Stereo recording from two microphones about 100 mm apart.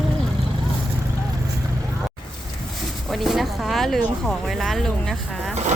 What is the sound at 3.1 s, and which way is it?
Speech, centre (ahead or behind).